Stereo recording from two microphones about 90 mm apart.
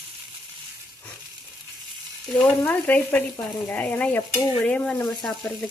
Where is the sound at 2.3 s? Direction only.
15° left (ahead or behind).